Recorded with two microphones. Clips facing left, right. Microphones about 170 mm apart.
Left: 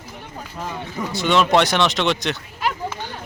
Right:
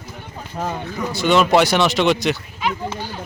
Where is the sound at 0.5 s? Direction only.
40° right (ahead or behind).